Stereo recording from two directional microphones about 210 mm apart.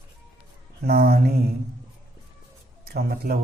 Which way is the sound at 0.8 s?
50° right (ahead or behind).